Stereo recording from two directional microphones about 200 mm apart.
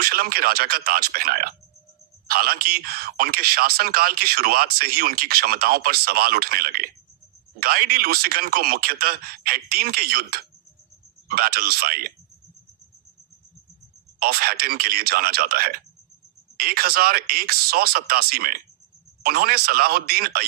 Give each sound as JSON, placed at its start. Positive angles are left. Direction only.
{"t": 0.0, "sound": "speech", "side_deg": -50}
{"t": 14.2, "sound": "speech", "side_deg": -50}